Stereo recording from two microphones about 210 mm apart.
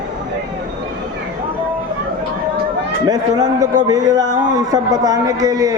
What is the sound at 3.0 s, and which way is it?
A man's voice, 20° right (ahead or behind).